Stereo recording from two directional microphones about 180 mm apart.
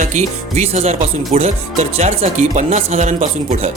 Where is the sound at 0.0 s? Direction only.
40° right (ahead or behind).